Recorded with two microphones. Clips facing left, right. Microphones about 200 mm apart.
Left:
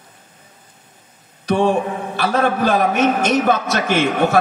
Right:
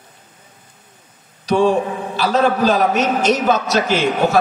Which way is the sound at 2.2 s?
55° left (ahead or behind).